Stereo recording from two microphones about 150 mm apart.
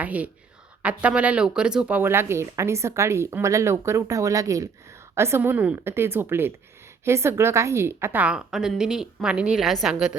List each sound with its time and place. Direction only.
0.0 s a woman's voice: 10° right (ahead or behind)